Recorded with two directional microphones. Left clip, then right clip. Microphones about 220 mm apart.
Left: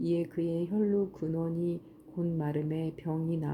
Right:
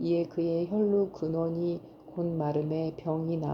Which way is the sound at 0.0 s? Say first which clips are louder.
Right 3 dB; 35° left (ahead or behind).